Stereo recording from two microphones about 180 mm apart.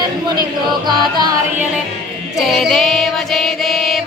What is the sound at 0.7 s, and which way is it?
Music, 25° right (ahead or behind).